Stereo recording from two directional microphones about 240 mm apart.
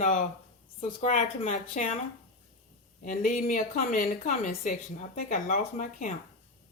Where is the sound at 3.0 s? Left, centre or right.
Left.